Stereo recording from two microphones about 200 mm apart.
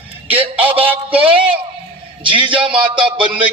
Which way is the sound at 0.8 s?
10° right (ahead or behind).